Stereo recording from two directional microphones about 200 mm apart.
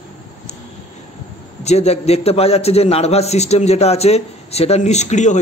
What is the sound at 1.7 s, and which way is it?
A man's voice, 30° left (ahead or behind).